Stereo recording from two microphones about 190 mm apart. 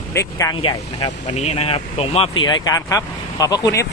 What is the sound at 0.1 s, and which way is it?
Speech, 15° left (ahead or behind).